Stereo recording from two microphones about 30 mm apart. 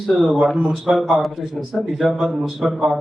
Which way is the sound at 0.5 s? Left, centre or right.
Right.